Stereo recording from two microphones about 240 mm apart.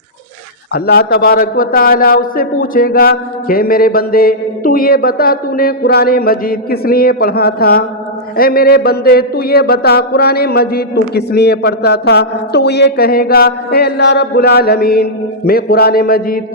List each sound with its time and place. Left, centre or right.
0.7 s a man's voice: left